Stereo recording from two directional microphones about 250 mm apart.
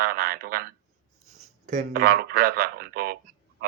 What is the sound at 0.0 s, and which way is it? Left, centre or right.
Speech, right.